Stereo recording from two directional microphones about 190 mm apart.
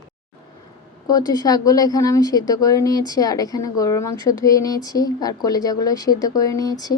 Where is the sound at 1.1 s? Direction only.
20° left (ahead or behind).